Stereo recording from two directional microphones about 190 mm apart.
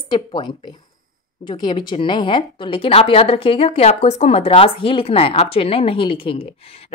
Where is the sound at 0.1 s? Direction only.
25° left (ahead or behind).